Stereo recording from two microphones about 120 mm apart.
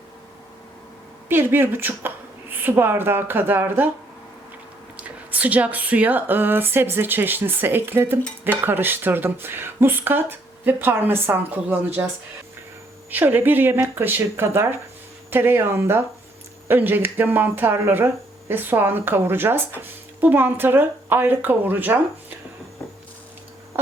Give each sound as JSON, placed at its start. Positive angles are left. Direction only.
{"t": 1.3, "sound": "speech", "side_deg": -20}
{"t": 4.9, "sound": "speech", "side_deg": -10}
{"t": 13.1, "sound": "speech", "side_deg": -15}